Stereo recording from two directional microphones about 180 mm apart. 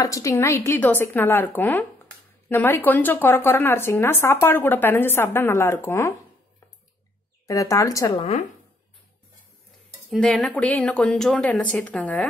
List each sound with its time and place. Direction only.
0.0 s speech: 15° left (ahead or behind)
7.4 s speech: 20° left (ahead or behind)
8.2 s speech: 35° left (ahead or behind)
10.2 s speech: 5° left (ahead or behind)